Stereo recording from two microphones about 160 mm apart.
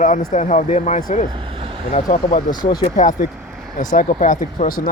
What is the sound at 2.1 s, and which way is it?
Speech, 60° left (ahead or behind).